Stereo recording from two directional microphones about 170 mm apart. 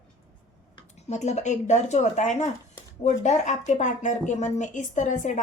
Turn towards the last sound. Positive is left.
turn(degrees=45)  # may be behind; listen again after turning